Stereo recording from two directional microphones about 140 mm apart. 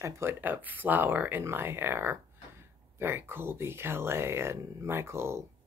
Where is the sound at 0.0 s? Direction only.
15° right (ahead or behind).